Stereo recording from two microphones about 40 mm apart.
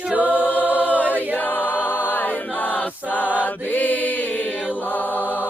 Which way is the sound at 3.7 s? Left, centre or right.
Left.